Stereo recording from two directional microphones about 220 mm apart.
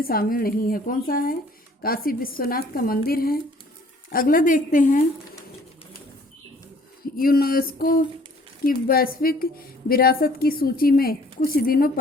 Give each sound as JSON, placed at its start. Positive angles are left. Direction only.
{"t": 0.0, "sound": "a woman's voice", "side_deg": 40}
{"t": 7.0, "sound": "a woman's voice", "side_deg": 40}